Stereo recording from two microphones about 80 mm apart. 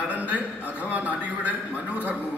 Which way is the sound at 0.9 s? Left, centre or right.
Centre.